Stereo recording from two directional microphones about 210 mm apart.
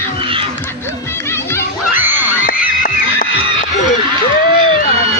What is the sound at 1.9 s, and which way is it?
Screaming, 10° right (ahead or behind).